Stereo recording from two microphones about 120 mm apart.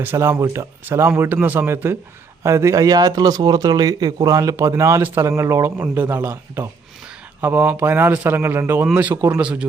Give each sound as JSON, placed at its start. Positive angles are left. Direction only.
{"t": 0.0, "sound": "speech", "side_deg": -20}